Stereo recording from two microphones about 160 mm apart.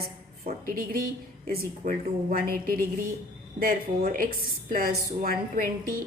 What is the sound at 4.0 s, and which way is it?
A woman's voice, 60° right (ahead or behind).